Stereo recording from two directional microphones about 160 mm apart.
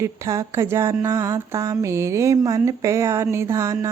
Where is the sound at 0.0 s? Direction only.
20° right (ahead or behind).